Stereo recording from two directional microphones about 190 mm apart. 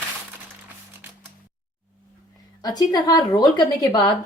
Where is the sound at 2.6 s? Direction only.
20° left (ahead or behind).